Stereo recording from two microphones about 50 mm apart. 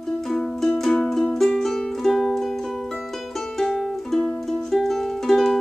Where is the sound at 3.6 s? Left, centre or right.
Centre.